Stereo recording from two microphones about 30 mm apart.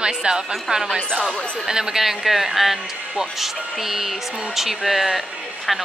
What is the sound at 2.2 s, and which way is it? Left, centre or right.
A woman's voice, centre.